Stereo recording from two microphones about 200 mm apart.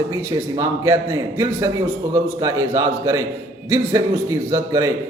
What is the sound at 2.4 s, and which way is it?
A man's voice, 15° right (ahead or behind).